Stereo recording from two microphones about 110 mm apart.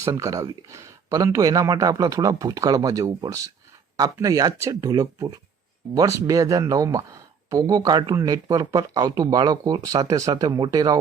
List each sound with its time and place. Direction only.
0.0 s speech: 30° right (ahead or behind)